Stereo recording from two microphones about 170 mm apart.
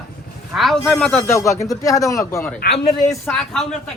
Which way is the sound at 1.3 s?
20° left (ahead or behind).